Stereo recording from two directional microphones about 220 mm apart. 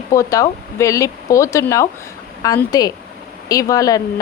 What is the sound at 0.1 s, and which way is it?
A woman's voice, 15° left (ahead or behind).